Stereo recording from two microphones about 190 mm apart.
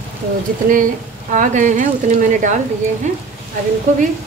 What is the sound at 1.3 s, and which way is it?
A woman's voice, 40° right (ahead or behind).